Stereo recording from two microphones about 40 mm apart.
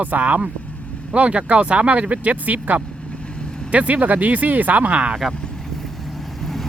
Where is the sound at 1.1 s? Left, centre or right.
Right.